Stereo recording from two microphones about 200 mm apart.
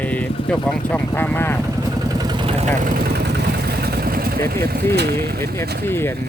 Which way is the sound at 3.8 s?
50° right (ahead or behind).